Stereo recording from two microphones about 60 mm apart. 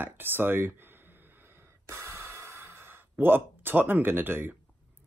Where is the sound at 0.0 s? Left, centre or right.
Right.